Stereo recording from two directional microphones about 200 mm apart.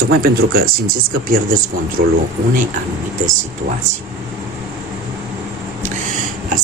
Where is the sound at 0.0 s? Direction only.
50° right (ahead or behind).